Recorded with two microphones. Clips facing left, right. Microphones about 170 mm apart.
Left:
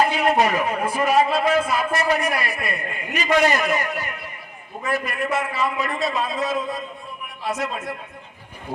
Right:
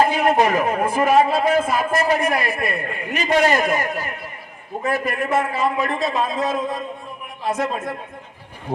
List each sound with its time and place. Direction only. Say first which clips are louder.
0.1 s a man's voice: right 2 dB; 50° right (ahead or behind)